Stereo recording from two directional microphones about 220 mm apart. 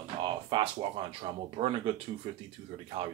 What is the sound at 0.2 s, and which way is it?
Speech, 25° right (ahead or behind).